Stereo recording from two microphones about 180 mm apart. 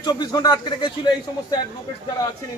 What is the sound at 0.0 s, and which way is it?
Speech, 20° left (ahead or behind).